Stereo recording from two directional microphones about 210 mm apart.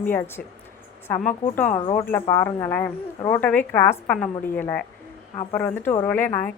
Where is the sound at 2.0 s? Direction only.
10° left (ahead or behind).